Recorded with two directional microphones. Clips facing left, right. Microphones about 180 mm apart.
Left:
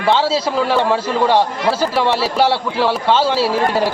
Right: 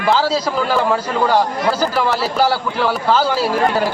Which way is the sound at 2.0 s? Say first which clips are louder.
Left 2 dB; 30° left (ahead or behind).